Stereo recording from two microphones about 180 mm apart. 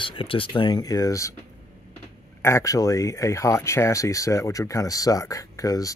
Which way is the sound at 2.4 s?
15° left (ahead or behind).